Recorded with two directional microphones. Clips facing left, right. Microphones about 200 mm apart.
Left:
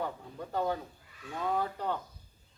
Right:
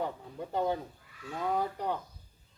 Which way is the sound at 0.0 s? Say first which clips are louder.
Right 1 dB; 20° right (ahead or behind).